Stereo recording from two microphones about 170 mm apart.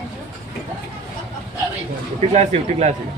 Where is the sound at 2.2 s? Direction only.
40° right (ahead or behind).